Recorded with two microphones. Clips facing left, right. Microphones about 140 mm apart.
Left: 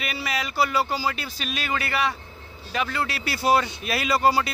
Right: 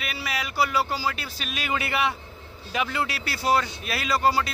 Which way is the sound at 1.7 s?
20° right (ahead or behind).